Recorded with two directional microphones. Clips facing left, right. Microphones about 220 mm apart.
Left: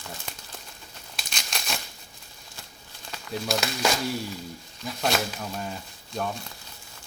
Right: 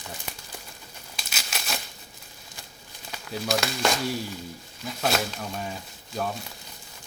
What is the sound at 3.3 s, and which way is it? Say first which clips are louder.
Speech: right 1 dB; centre (ahead or behind).